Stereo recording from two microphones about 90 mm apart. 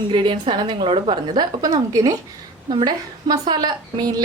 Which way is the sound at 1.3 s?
45° right (ahead or behind).